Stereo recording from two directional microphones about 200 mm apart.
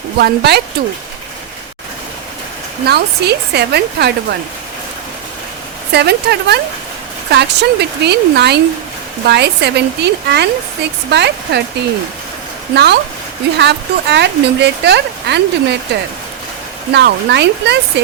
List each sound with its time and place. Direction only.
0.2 s speech: 55° right (ahead or behind)
2.8 s speech: 55° right (ahead or behind)
5.9 s speech: 55° right (ahead or behind)
12.7 s speech: 55° right (ahead or behind)
16.9 s speech: 55° right (ahead or behind)